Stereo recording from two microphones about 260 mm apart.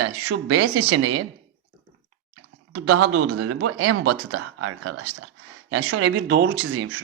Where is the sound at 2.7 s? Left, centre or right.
Right.